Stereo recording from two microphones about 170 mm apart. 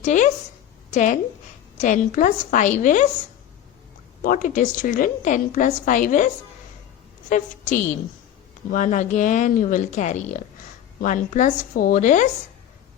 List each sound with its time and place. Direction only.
0.0 s a woman's voice: 45° left (ahead or behind)
4.2 s a woman's voice: 55° left (ahead or behind)